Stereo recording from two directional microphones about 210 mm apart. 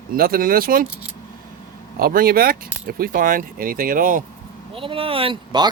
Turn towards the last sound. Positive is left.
turn(degrees=-20)  # may be behind; listen again after turning